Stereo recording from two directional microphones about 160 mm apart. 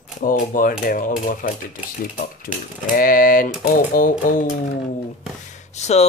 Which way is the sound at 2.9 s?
60° left (ahead or behind).